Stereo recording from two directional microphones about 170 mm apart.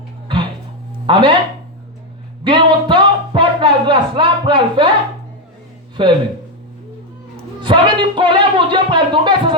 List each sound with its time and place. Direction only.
1.0 s speech: 30° right (ahead or behind)
2.4 s a sound: 30° right (ahead or behind)
6.0 s speech: 30° right (ahead or behind)
7.6 s speech: 25° right (ahead or behind)